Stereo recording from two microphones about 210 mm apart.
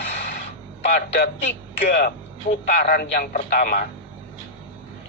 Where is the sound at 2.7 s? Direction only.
45° left (ahead or behind).